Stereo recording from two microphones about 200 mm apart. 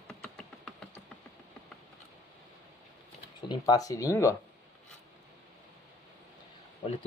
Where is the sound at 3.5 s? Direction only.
20° left (ahead or behind).